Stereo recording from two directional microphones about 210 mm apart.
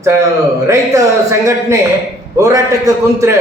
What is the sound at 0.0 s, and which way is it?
A man's voice, 15° right (ahead or behind).